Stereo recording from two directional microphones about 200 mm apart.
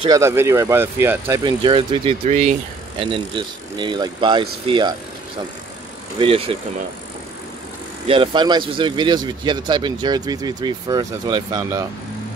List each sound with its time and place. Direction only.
0.0 s speech: 15° right (ahead or behind)
6.1 s speech: 25° right (ahead or behind)
8.1 s speech: 25° right (ahead or behind)